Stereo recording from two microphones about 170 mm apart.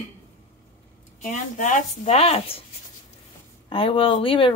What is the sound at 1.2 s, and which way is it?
Speech, 45° left (ahead or behind).